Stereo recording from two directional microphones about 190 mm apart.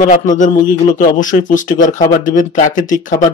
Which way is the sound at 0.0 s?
40° left (ahead or behind).